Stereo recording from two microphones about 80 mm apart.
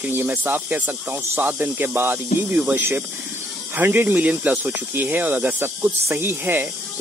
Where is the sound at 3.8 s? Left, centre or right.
Right.